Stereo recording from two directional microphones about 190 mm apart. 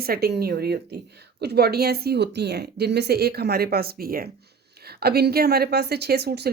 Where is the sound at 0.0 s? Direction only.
55° right (ahead or behind).